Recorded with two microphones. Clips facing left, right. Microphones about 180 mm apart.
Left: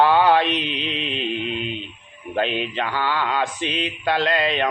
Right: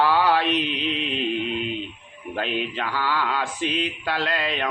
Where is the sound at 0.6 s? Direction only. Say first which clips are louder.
Right 1 dB; 45° right (ahead or behind).